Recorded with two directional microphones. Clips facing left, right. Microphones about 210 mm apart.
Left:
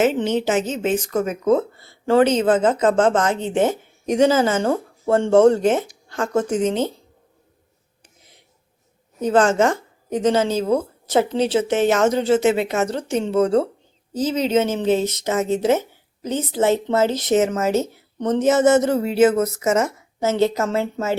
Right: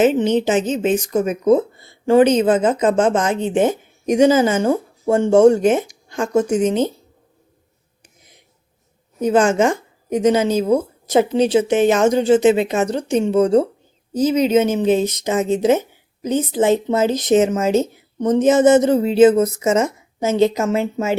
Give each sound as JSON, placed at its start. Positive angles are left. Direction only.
{"t": 0.0, "sound": "speech", "side_deg": -15}
{"t": 8.0, "sound": "a sound", "side_deg": -15}
{"t": 9.2, "sound": "speech", "side_deg": -10}